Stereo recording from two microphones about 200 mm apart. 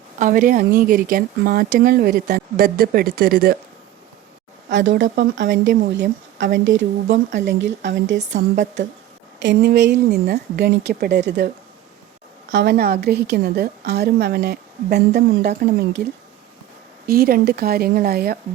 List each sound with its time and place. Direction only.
0.2 s a woman's voice: 40° right (ahead or behind)
4.7 s speech: 65° right (ahead or behind)
9.4 s a woman's voice: 60° right (ahead or behind)
17.1 s a woman's voice: 50° right (ahead or behind)